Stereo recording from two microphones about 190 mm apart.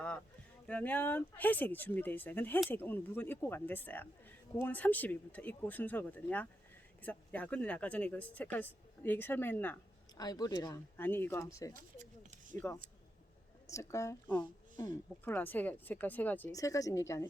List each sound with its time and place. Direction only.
0.7 s speech: 10° left (ahead or behind)
11.8 s a sound: 40° right (ahead or behind)
13.7 s speech: 15° left (ahead or behind)